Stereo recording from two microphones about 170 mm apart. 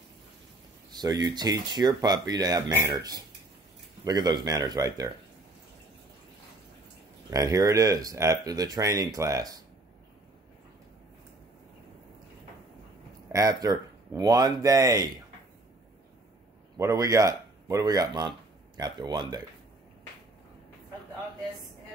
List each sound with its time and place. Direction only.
0.9 s speech: 25° right (ahead or behind)
7.2 s speech: 20° right (ahead or behind)
13.3 s speech: 20° right (ahead or behind)
16.7 s speech: 20° right (ahead or behind)